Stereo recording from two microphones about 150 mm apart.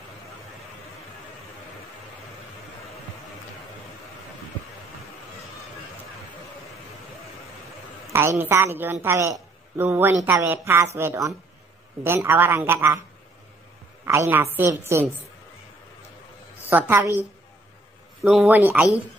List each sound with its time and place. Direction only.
8.1 s a woman's voice: 15° right (ahead or behind)
14.0 s a woman's voice: 15° right (ahead or behind)
16.6 s a woman's voice: 15° right (ahead or behind)
18.2 s a woman's voice: 5° right (ahead or behind)